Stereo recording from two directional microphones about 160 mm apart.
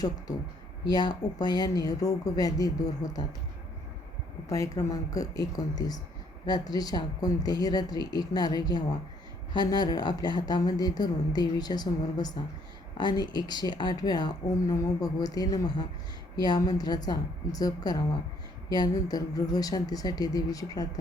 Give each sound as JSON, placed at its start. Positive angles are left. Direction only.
{"t": 0.9, "sound": "speech", "side_deg": 25}
{"t": 4.4, "sound": "speech", "side_deg": 20}